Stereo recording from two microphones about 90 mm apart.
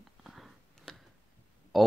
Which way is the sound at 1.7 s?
Centre (ahead or behind).